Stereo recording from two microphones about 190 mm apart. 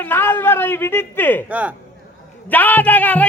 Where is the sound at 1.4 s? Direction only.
10° right (ahead or behind).